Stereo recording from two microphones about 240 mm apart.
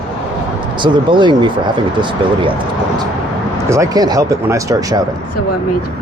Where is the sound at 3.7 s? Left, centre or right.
Centre.